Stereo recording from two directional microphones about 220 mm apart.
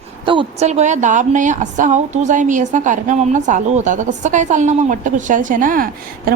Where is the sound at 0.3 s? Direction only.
25° right (ahead or behind).